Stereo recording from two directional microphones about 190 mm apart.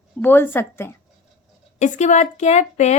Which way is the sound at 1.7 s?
40° left (ahead or behind).